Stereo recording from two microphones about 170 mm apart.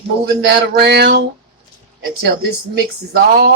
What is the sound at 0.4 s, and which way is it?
Speech, 70° right (ahead or behind).